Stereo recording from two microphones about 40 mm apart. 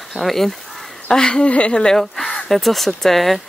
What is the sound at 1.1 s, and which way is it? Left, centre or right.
Speech, left.